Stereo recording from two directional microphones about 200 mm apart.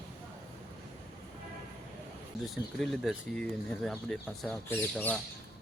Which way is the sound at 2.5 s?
Centre (ahead or behind).